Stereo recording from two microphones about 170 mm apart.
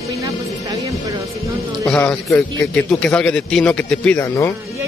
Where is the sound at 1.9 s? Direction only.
10° left (ahead or behind).